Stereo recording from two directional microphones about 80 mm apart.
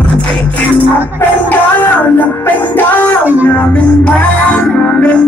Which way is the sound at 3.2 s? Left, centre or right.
Right.